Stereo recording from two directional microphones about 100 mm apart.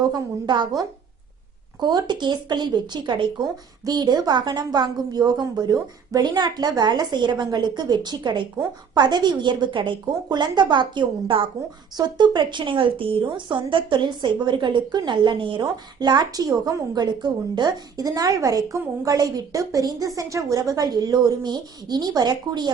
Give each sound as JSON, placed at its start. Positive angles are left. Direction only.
{"t": 0.0, "sound": "speech", "side_deg": -45}